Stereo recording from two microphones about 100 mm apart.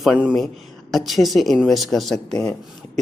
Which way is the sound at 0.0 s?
10° right (ahead or behind).